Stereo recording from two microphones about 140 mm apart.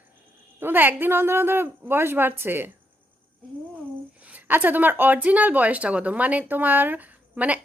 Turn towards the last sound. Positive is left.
turn(degrees=-10)  # may be behind; listen again after turning